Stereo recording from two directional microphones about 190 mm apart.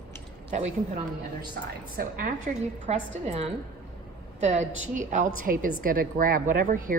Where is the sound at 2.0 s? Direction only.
45° right (ahead or behind).